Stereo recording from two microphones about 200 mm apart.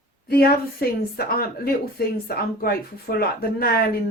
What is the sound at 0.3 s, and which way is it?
A woman's voice, 50° left (ahead or behind).